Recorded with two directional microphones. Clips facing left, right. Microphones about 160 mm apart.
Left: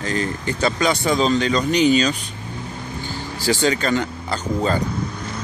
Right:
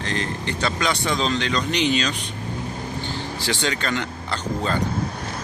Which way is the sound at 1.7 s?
40° left (ahead or behind).